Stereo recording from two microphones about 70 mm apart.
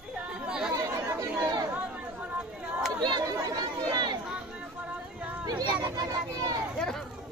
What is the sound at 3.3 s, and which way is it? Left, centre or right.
Chatter, right.